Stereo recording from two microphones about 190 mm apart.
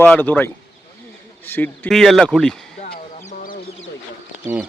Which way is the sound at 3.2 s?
40° left (ahead or behind).